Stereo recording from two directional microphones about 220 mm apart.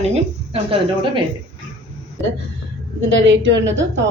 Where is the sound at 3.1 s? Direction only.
55° right (ahead or behind).